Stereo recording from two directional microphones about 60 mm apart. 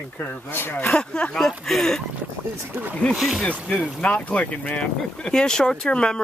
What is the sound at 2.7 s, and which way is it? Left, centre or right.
Speech, right.